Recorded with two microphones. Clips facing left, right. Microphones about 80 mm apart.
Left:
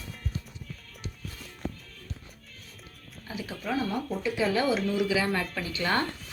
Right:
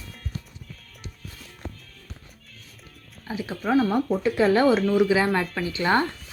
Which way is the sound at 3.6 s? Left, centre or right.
Right.